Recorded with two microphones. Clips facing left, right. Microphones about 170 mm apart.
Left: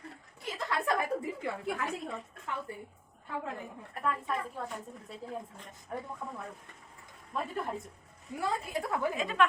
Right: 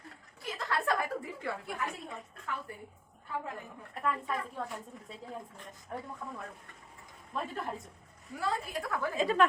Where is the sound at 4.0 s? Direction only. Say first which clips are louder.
Even; centre (ahead or behind).